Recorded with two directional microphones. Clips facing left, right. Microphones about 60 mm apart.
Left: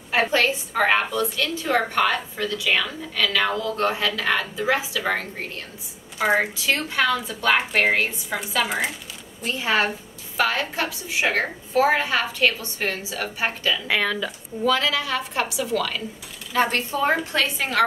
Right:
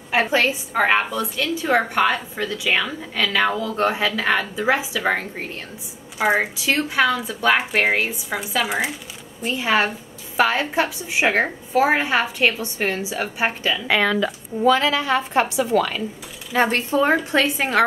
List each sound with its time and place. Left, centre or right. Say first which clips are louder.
0.1 s a woman's voice: right 1 dB; centre
13.8 s speech: right 8 dB; right
14.6 s a woman's voice: right 4 dB; right